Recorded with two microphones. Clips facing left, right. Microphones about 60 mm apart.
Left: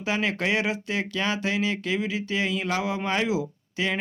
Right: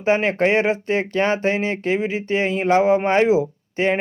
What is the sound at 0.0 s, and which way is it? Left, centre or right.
Speech, right.